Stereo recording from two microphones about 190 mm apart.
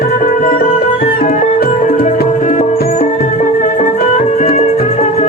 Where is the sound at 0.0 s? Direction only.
50° left (ahead or behind).